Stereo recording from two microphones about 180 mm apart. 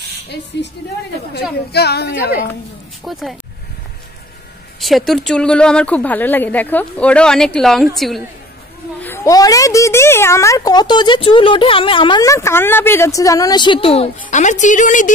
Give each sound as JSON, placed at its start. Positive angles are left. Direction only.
{"t": 1.7, "sound": "a woman's voice", "side_deg": 65}
{"t": 3.1, "sound": "speech", "side_deg": 0}
{"t": 4.7, "sound": "speech", "side_deg": 0}
{"t": 9.0, "sound": "a child's voice", "side_deg": 15}